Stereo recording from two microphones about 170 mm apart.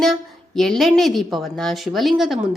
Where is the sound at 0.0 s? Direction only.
Centre (ahead or behind).